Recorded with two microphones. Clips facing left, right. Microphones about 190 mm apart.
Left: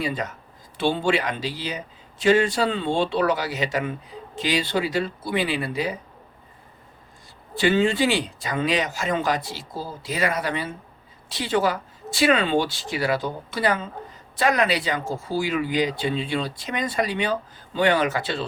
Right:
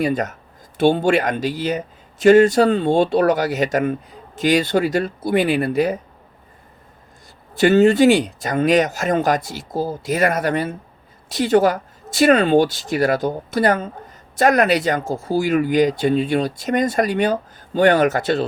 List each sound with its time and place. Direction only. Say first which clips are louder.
0.0 s speech: right 7 dB; 45° right (ahead or behind)
7.6 s speech: right 8 dB; 45° right (ahead or behind)